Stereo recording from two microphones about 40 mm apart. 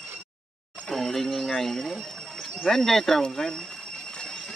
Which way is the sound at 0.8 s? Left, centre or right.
Centre.